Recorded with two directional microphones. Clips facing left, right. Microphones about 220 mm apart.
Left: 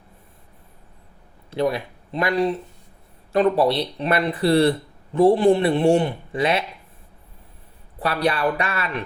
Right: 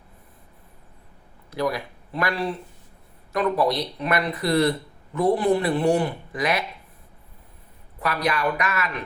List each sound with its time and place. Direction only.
1.5 s speech: 25° left (ahead or behind)
7.9 s speech: 30° left (ahead or behind)